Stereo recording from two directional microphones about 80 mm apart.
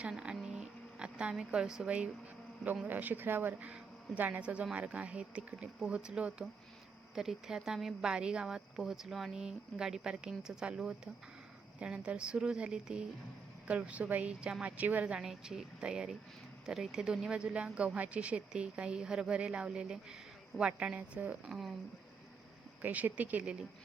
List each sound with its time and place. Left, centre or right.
0.0 s a sound: centre
0.4 s music: centre
2.8 s speech: right
15.2 s speech: centre
22.8 s speech: right